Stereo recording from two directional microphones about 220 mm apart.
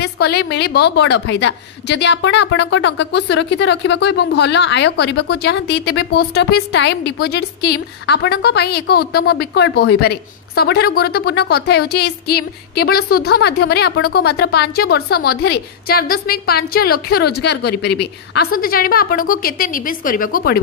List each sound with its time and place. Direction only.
0.0 s a woman's voice: 50° left (ahead or behind)